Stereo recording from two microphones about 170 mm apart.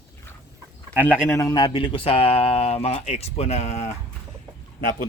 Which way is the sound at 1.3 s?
20° left (ahead or behind).